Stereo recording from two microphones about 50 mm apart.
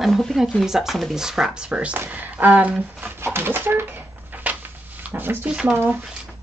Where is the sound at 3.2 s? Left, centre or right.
Right.